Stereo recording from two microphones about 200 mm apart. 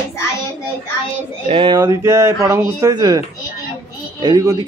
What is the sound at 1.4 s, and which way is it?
A man's voice, 25° right (ahead or behind).